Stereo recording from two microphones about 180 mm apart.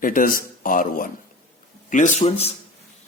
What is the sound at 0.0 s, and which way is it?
Speech, 50° left (ahead or behind).